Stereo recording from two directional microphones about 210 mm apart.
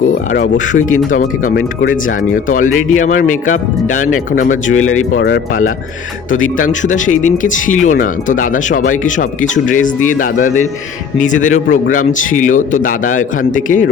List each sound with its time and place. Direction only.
0.5 s speech: 35° left (ahead or behind)
4.7 s speech: 80° left
5.1 s speech: 45° left (ahead or behind)